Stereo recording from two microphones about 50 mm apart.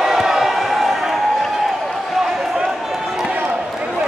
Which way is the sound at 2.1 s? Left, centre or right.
Centre.